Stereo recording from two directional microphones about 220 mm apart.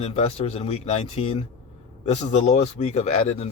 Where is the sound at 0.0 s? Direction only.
30° left (ahead or behind).